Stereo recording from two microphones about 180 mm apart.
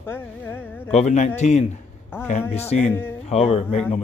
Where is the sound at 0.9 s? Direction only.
40° left (ahead or behind).